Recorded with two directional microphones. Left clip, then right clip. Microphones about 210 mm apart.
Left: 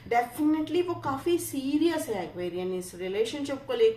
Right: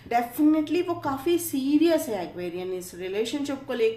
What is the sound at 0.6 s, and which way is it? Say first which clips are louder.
Speech: right 2 dB; 40° right (ahead or behind).